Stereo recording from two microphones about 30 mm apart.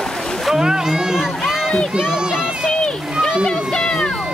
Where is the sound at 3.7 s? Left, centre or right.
Left.